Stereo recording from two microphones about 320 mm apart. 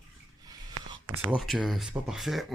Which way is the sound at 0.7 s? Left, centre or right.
Right.